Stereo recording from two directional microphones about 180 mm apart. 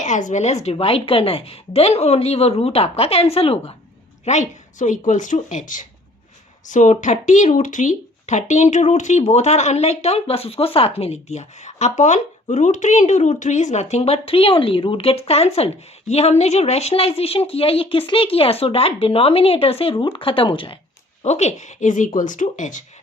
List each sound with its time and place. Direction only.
0.0 s speech: 45° left (ahead or behind)